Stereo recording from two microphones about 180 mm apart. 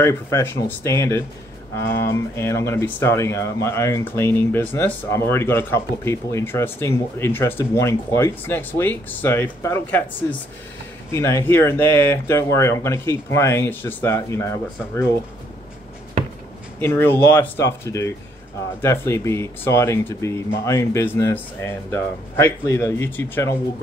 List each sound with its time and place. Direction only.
0.0 s speech: 15° left (ahead or behind)
11.1 s speech: 15° left (ahead or behind)
16.8 s speech: 10° left (ahead or behind)